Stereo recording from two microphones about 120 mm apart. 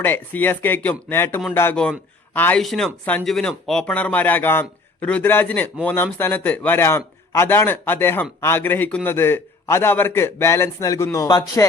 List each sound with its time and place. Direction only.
0.0 s a man's voice: 15° left (ahead or behind)
1.7 s speech: 5° left (ahead or behind)
2.6 s a man's voice: 5° left (ahead or behind); by 11.6 s 30° left (ahead or behind)